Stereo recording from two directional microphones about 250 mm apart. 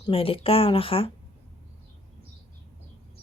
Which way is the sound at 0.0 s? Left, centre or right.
Left.